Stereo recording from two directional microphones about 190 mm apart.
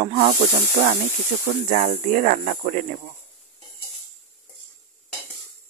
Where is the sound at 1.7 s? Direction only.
40° right (ahead or behind).